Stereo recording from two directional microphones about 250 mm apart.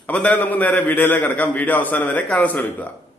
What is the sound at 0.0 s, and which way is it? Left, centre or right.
A man's voice, centre.